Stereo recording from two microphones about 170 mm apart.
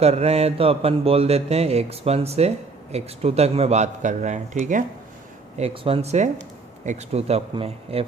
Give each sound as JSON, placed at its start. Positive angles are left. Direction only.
{"t": 0.0, "sound": "speech", "side_deg": -35}